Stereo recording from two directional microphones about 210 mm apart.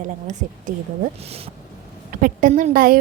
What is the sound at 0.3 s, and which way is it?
A woman's voice, 35° right (ahead or behind).